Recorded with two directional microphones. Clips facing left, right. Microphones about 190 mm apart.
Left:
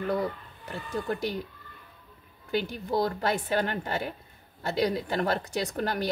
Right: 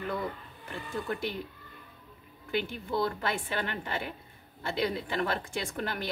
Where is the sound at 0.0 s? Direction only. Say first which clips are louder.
Left 5 dB; 40° left (ahead or behind).